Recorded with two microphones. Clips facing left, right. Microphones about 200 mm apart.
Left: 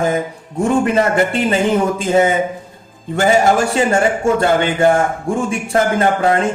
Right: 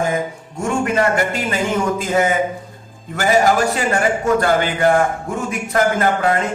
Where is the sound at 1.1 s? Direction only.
30° left (ahead or behind).